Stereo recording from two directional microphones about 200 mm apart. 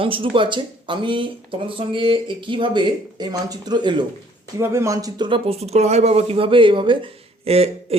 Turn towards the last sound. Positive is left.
turn(degrees=-30)  # may be behind; listen again after turning